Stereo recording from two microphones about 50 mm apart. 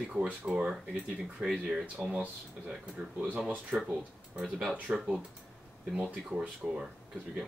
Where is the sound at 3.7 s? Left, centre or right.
Right.